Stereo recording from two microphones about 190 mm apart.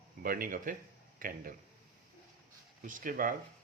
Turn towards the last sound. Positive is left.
turn(degrees=-45)  # may be behind; listen again after turning